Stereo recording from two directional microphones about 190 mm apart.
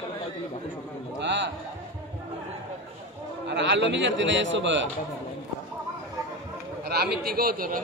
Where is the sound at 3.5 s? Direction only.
70° right (ahead or behind).